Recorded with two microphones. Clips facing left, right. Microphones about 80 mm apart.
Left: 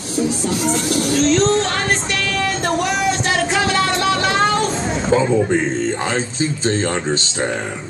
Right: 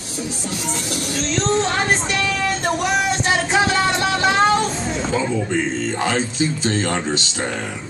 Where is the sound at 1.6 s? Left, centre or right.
Centre.